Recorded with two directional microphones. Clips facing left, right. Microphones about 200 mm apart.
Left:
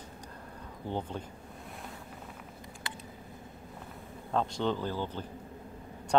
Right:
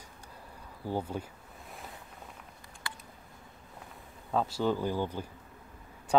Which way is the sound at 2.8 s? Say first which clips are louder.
Even; 20° left (ahead or behind).